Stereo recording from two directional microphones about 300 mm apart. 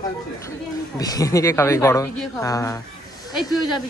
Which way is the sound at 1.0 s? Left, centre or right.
Centre.